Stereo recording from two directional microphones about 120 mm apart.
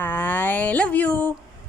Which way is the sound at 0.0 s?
15° left (ahead or behind).